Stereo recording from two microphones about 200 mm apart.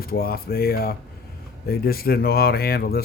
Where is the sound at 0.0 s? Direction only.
50° left (ahead or behind).